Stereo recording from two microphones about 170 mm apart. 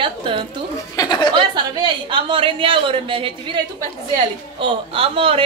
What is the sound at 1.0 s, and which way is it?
Speech, 25° left (ahead or behind).